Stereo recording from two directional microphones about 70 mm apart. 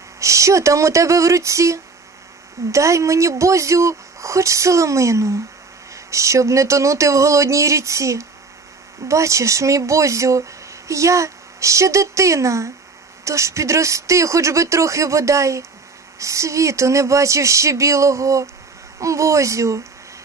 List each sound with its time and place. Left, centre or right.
0.2 s speech: right